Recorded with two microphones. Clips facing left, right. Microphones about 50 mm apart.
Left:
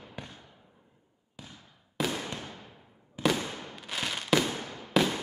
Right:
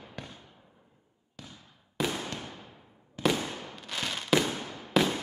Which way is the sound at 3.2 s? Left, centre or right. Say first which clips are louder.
Even; centre.